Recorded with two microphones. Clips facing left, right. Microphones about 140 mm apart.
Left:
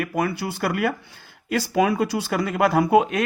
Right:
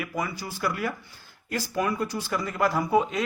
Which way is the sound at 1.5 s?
80° left.